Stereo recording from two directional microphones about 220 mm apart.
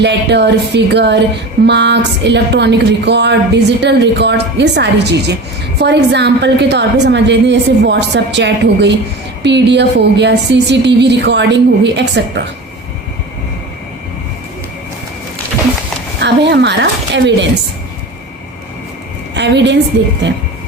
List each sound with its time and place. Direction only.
0.0 s a woman's voice: 50° right (ahead or behind)
16.2 s a woman's voice: 50° right (ahead or behind)
19.3 s a woman's voice: 50° right (ahead or behind)